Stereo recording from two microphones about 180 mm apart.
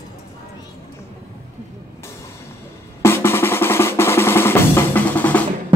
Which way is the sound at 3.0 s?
15° left (ahead or behind).